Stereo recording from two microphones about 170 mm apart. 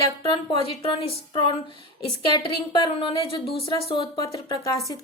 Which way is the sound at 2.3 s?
25° left (ahead or behind).